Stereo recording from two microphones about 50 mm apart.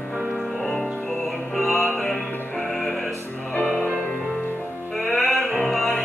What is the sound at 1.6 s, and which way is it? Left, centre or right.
Music, centre.